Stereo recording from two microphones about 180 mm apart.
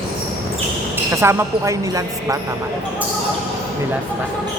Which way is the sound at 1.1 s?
15° right (ahead or behind).